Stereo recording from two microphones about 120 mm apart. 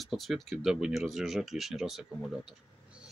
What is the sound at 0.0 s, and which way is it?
Speech, centre (ahead or behind).